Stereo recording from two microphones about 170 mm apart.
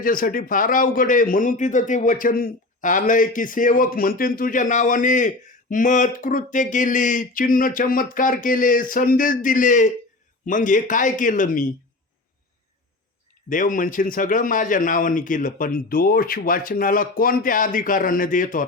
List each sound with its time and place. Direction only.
0.0 s a man's voice: 55° left (ahead or behind)
13.5 s a man's voice: 50° left (ahead or behind)